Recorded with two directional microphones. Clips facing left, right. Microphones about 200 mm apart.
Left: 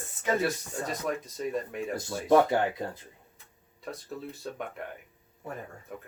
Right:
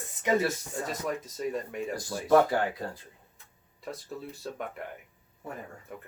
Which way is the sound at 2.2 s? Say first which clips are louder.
Even; 20° left (ahead or behind).